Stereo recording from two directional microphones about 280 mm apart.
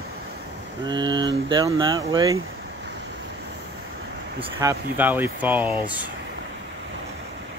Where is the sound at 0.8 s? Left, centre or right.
Centre.